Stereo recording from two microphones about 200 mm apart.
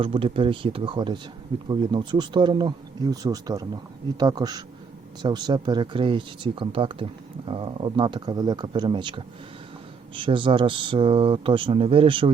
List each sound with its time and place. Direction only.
0.0 s speech: 25° right (ahead or behind)